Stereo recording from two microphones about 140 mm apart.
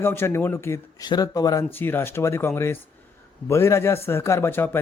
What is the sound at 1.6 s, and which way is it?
A man's voice, 15° left (ahead or behind).